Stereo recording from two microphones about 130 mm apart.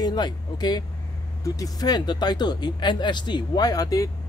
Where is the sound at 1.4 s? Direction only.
30° left (ahead or behind).